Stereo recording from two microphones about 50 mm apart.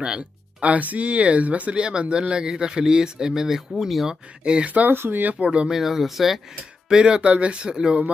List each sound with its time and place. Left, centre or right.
0.0 s music: centre
0.7 s speech: right; by 4.2 s centre
4.5 s speech: right
4.9 s speech: right
5.2 s speech: right
5.7 s speech: centre
6.9 s speech: centre